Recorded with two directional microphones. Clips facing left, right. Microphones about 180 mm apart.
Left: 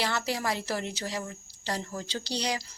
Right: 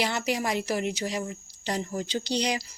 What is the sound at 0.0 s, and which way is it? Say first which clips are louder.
Speech: right 3 dB; 15° right (ahead or behind).